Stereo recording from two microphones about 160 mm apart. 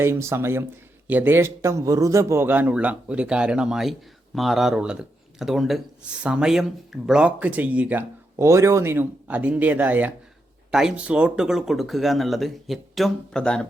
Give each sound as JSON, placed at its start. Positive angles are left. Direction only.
{"t": 0.0, "sound": "speech", "side_deg": -15}